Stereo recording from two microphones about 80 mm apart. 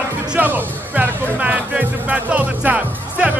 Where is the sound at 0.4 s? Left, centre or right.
Right.